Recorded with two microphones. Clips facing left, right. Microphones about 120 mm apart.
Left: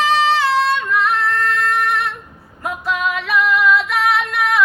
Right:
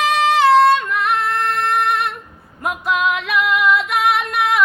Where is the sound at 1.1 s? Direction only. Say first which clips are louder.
Even; 20° right (ahead or behind).